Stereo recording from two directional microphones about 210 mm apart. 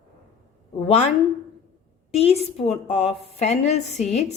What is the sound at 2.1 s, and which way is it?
A woman's voice, 30° left (ahead or behind).